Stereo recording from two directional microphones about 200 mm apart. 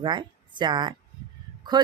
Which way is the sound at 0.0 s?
25° right (ahead or behind).